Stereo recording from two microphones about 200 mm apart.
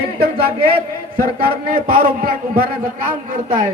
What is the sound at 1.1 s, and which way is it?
Speech, 45° right (ahead or behind).